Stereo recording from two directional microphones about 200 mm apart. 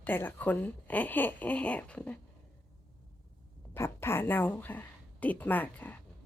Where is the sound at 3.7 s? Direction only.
10° left (ahead or behind).